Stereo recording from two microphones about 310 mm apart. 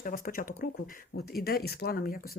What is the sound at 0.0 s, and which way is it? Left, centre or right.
Speech, left.